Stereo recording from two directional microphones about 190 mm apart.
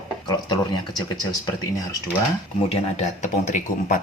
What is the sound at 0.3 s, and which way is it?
Speech, 20° left (ahead or behind).